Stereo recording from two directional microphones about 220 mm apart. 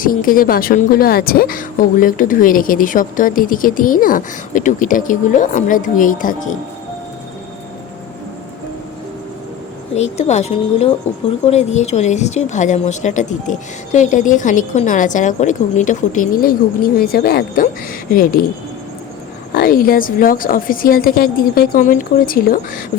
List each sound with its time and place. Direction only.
0.0 s speech: 40° left (ahead or behind)
9.9 s speech: 30° left (ahead or behind)
19.5 s speech: 40° left (ahead or behind)